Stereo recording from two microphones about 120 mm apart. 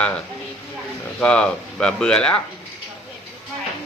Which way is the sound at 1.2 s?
10° left (ahead or behind).